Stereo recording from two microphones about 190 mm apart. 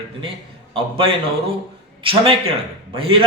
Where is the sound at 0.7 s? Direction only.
30° right (ahead or behind).